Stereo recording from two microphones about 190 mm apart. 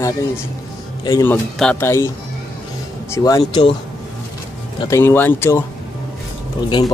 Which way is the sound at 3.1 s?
15° left (ahead or behind).